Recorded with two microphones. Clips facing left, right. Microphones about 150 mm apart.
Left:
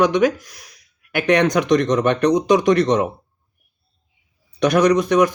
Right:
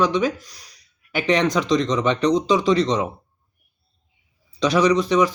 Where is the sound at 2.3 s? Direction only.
20° left (ahead or behind).